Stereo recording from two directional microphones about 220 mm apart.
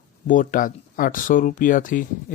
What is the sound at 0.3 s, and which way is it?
Speech, 40° left (ahead or behind).